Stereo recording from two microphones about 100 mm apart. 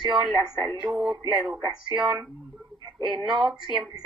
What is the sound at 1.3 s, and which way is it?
Speech, 5° right (ahead or behind).